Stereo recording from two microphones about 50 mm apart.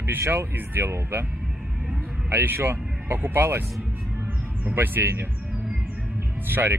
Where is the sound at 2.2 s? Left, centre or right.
Right.